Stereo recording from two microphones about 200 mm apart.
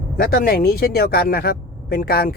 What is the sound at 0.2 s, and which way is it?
Speech, 50° left (ahead or behind).